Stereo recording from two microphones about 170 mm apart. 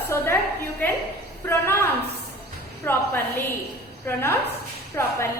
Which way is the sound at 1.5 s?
15° left (ahead or behind).